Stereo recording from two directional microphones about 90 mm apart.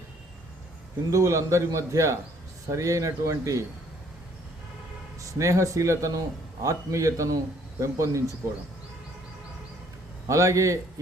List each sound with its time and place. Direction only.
1.1 s speech: 35° right (ahead or behind)
5.2 s speech: 35° right (ahead or behind)
10.2 s speech: 35° right (ahead or behind)